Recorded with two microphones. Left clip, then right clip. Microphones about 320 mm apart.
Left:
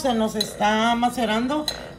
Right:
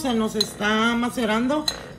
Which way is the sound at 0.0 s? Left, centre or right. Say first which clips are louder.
Left 1 dB; centre.